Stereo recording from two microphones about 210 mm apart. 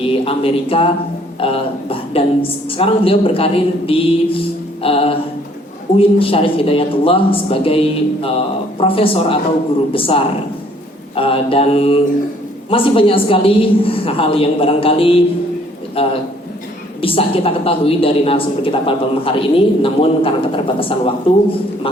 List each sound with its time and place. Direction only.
0.0 s a man's voice: 25° left (ahead or behind)